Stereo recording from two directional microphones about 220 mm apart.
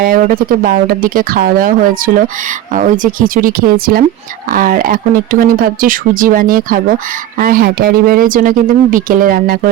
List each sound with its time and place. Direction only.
0.0 s speech: 40° right (ahead or behind)
2.7 s speech: 35° right (ahead or behind)